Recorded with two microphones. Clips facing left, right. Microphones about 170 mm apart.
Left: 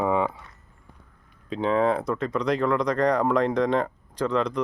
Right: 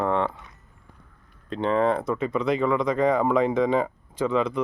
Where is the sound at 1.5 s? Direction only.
Centre (ahead or behind).